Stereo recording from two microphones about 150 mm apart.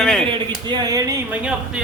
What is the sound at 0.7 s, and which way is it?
Speech, 25° right (ahead or behind).